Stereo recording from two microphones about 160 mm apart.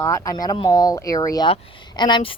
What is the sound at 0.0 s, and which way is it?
Speech, 20° left (ahead or behind).